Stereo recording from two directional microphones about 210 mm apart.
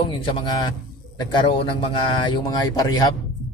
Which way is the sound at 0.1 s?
20° left (ahead or behind).